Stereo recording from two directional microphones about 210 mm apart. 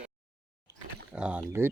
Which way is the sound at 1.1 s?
5° right (ahead or behind).